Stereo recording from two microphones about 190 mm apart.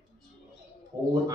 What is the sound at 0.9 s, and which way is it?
Speech, 20° right (ahead or behind).